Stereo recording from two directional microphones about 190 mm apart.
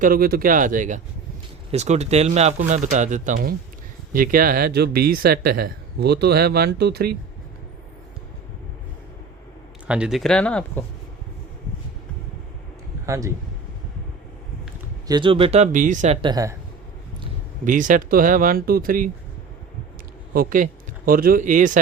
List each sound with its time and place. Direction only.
0.0 s speech: 50° right (ahead or behind)
9.8 s speech: 5° right (ahead or behind)
13.1 s a man's voice: 15° right (ahead or behind)
15.0 s speech: 25° right (ahead or behind); by 16.1 s 40° right (ahead or behind)
16.2 s speech: 20° right (ahead or behind)
17.7 s speech: 40° right (ahead or behind)
20.3 s speech: 45° right (ahead or behind)